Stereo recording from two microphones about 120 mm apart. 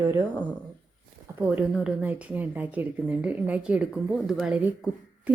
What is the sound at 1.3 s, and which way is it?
A woman's voice, 15° right (ahead or behind).